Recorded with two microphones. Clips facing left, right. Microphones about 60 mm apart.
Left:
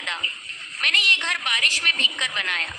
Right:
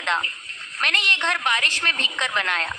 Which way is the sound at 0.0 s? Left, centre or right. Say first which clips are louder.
Right 5 dB; right.